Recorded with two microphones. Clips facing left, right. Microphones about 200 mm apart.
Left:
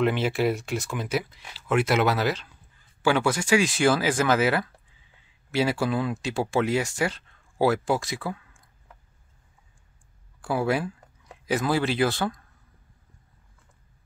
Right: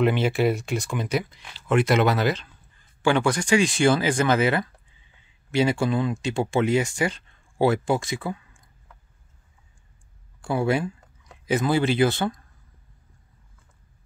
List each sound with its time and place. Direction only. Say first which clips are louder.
0.0 s speech: right 2 dB; centre (ahead or behind)
10.4 s speech: right 2 dB; centre (ahead or behind)